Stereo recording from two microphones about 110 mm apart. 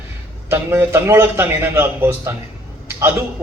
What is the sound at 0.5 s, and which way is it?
A man's voice, 20° right (ahead or behind).